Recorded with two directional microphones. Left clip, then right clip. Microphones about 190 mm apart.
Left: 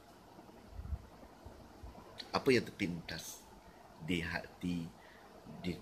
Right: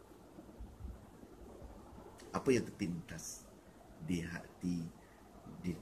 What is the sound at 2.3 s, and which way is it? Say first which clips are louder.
Speech: left 3 dB; 10° left (ahead or behind).